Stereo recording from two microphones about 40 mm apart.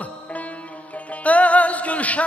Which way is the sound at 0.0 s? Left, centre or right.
Left.